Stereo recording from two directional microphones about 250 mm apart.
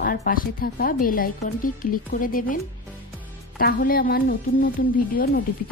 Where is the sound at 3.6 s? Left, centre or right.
Left.